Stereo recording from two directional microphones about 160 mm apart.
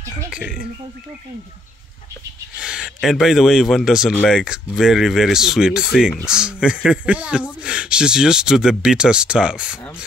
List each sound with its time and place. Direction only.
0.3 s speech: 5° right (ahead or behind)
2.5 s speech: 5° right (ahead or behind)